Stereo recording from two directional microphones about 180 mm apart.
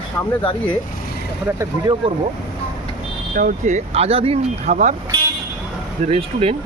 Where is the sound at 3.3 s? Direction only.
45° right (ahead or behind).